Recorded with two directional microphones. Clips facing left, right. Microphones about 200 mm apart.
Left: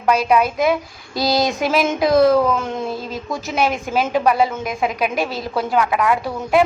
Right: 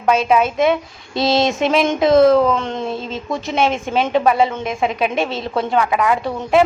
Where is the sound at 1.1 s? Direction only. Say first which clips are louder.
Right 2 dB; 25° right (ahead or behind).